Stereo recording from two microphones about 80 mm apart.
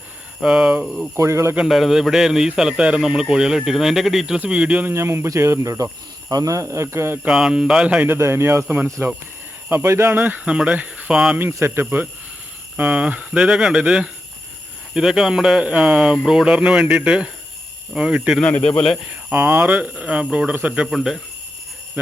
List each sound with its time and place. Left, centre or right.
0.4 s speech: centre
1.1 s speech: right
1.6 s a man's voice: centre
4.9 s speech: right
7.3 s speech: centre
8.0 s speech: right
8.6 s speech: centre
9.6 s speech: right
10.2 s speech: right
11.3 s speech: right; by 18.3 s centre
18.4 s a man's voice: centre
19.3 s speech: right
20.8 s a man's voice: centre